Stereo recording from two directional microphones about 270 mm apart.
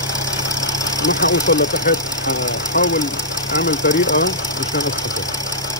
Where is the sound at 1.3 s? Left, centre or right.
Left.